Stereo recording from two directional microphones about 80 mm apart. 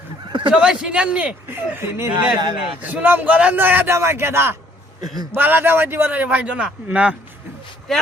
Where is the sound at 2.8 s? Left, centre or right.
Right.